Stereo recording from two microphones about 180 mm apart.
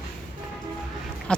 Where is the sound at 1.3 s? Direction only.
5° left (ahead or behind).